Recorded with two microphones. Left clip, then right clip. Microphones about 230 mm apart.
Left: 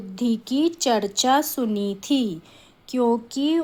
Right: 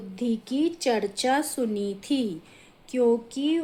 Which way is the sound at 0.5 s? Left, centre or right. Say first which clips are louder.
Left 4 dB; left.